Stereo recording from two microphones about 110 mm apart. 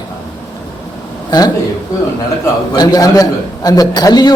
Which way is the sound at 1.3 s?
40° left (ahead or behind).